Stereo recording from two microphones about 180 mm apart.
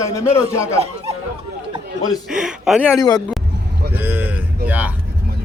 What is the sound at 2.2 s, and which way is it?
Speech, 5° right (ahead or behind).